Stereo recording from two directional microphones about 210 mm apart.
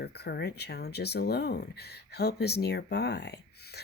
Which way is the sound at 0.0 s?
50° left (ahead or behind).